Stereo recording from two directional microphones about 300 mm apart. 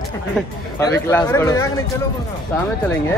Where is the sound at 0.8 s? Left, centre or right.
Centre.